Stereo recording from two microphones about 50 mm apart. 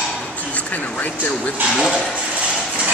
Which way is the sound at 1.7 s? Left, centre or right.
Centre.